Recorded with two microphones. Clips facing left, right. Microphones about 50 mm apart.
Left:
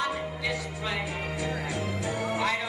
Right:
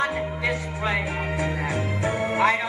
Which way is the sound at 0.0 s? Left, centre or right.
Right.